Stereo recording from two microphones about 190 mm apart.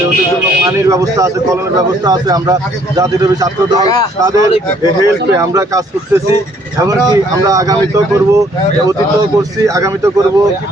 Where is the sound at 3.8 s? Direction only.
20° left (ahead or behind).